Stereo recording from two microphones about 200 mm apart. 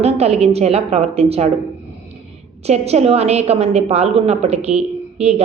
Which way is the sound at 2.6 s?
30° right (ahead or behind).